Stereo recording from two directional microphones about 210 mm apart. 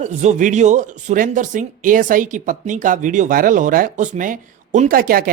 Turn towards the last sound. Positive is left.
turn(degrees=-45)  # may be behind; listen again after turning